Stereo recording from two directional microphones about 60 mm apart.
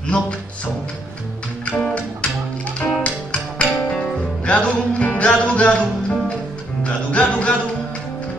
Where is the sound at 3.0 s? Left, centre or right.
Centre.